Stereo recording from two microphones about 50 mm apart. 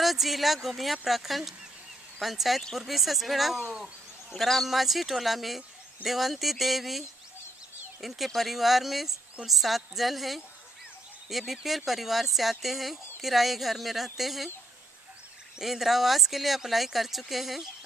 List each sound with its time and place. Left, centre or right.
0.0 s speech: centre
3.6 s speech: centre
4.3 s speech: centre
15.6 s speech: centre